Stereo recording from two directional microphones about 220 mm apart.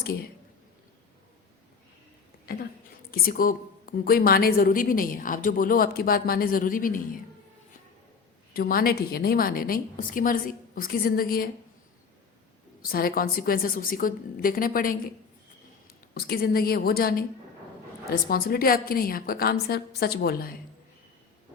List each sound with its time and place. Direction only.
3.1 s a woman's voice: 40° left (ahead or behind)
8.5 s a woman's voice: 40° left (ahead or behind)
12.8 s a woman's voice: 40° left (ahead or behind)
16.1 s a woman's voice: 45° left (ahead or behind)
18.3 s a woman's voice: 45° left (ahead or behind)